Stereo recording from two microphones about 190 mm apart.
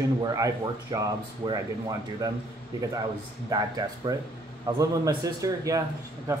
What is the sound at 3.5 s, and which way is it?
A man's voice, 20° right (ahead or behind).